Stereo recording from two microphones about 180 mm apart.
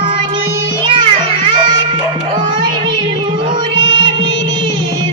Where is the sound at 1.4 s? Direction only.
25° right (ahead or behind).